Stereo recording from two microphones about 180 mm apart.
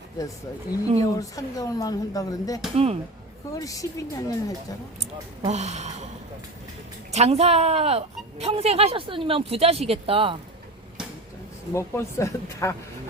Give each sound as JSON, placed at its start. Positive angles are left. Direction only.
{"t": 1.1, "sound": "speech", "side_deg": 20}
{"t": 2.7, "sound": "speech", "side_deg": -35}
{"t": 3.5, "sound": "speech", "side_deg": 20}
{"t": 4.9, "sound": "speech", "side_deg": -35}
{"t": 7.1, "sound": "speech", "side_deg": -35}
{"t": 11.7, "sound": "speech", "side_deg": 15}